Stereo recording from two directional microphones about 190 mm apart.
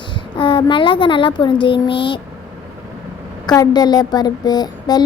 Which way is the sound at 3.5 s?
20° left (ahead or behind).